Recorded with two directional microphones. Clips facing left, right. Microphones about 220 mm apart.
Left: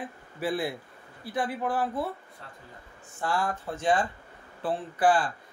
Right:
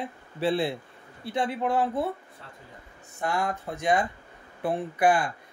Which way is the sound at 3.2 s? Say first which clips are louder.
Right 1 dB; 20° right (ahead or behind).